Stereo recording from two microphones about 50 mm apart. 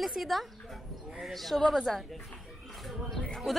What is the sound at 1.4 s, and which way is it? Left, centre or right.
Speech, centre.